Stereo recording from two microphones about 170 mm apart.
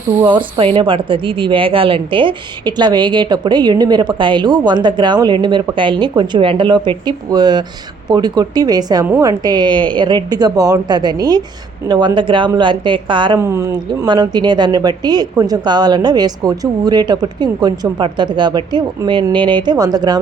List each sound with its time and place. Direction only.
0.6 s a woman's voice: 30° right (ahead or behind)
9.0 s a woman's voice: 10° right (ahead or behind)
9.4 s a woman's voice: 25° right (ahead or behind)
13.4 s a woman's voice: 15° right (ahead or behind)